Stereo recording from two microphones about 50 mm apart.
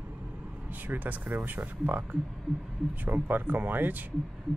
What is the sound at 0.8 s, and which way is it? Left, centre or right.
Speech, right.